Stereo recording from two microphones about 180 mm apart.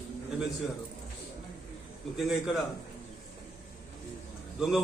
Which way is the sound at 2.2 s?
5° right (ahead or behind).